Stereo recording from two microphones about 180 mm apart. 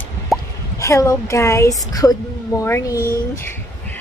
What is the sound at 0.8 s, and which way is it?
Speech, 15° left (ahead or behind).